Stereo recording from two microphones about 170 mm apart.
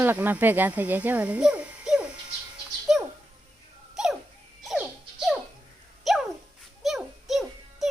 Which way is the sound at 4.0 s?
5° right (ahead or behind).